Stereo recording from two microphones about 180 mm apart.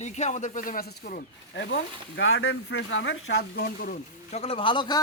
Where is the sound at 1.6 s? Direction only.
90° left; by 4.0 s 55° left (ahead or behind).